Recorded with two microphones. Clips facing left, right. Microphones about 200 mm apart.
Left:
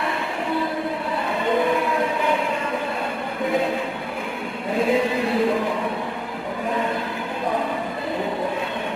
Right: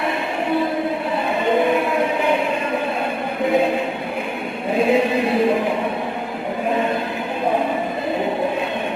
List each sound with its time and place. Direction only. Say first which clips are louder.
4.7 s chant: right 3 dB; 25° right (ahead or behind)